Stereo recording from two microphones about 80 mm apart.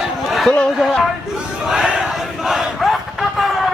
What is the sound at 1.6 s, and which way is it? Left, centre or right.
Battle cry, centre.